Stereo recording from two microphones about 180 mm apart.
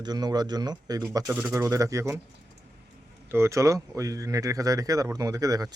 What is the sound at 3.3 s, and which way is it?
Speech, 15° right (ahead or behind).